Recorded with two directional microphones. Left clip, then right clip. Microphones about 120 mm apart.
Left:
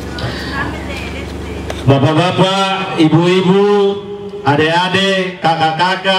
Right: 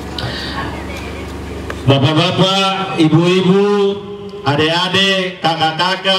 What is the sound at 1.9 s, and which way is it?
A man's voice, 25° right (ahead or behind).